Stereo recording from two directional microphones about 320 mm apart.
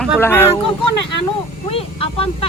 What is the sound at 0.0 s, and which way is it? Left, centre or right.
Speech, centre.